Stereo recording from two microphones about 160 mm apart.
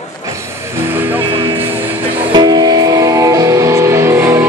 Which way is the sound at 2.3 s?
25° right (ahead or behind).